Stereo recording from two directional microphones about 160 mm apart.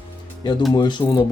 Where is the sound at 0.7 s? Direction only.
25° left (ahead or behind).